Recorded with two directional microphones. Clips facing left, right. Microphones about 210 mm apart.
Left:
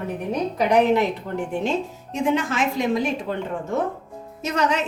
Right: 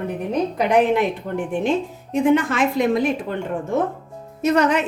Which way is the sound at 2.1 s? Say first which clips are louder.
Right 5 dB; 55° right (ahead or behind).